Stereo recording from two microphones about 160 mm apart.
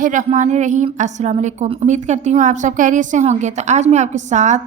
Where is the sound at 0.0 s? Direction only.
55° right (ahead or behind).